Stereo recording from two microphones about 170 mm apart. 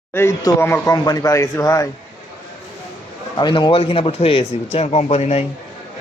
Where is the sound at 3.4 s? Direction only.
25° left (ahead or behind).